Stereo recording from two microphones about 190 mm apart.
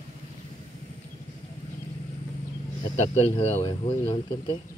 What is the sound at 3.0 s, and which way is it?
Speech, 35° left (ahead or behind).